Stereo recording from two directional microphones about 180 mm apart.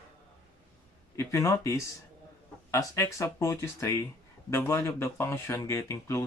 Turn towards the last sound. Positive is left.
turn(degrees=15)  # may be behind; listen again after turning